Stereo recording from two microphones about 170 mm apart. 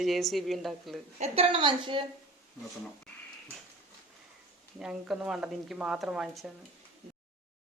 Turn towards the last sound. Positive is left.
turn(degrees=-5)  # may be behind; listen again after turning